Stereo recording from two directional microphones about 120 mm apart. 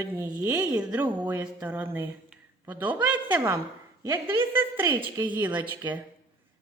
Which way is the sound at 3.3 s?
20° right (ahead or behind).